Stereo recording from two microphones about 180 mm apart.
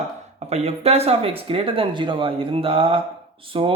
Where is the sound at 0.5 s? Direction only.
35° right (ahead or behind).